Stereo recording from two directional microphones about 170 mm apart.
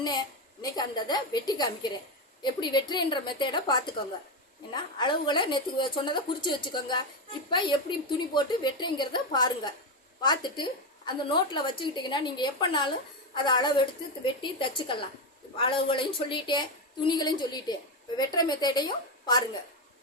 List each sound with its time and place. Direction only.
0.0 s a woman's voice: 25° left (ahead or behind)